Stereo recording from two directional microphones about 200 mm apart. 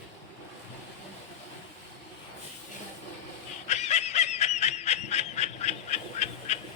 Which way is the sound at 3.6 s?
35° left (ahead or behind).